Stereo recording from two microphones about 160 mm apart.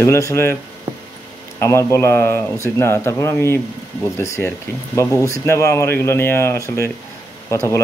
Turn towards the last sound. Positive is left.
turn(degrees=20)  # may be behind; listen again after turning